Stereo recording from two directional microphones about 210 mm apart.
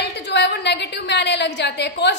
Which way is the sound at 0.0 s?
55° left (ahead or behind).